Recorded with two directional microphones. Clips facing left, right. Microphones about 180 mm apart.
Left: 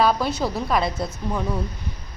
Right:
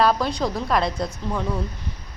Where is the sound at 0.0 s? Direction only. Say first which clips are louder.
Even; centre (ahead or behind).